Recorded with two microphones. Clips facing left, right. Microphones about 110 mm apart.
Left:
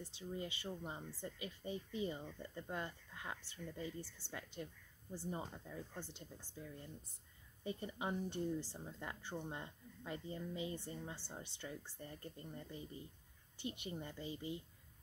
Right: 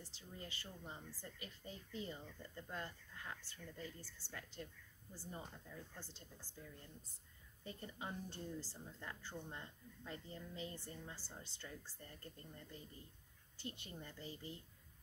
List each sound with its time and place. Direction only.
0.0 s speech: 20° left (ahead or behind)
7.6 s speech: 20° left (ahead or behind)